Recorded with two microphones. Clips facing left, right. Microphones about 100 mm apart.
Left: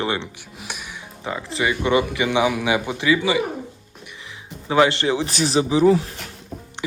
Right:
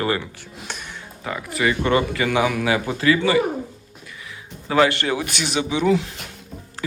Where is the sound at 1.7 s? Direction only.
15° left (ahead or behind).